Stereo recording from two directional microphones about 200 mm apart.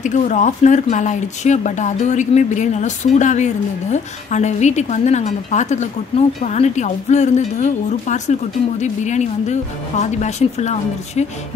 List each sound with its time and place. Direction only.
0.0 s speech: 40° left (ahead or behind)